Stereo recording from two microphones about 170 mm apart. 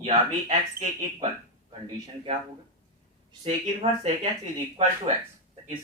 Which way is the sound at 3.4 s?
35° right (ahead or behind).